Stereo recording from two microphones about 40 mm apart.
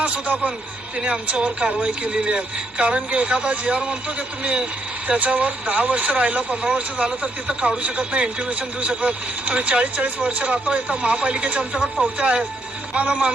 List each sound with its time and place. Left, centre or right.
0.0 s speech: right
5.0 s speech: right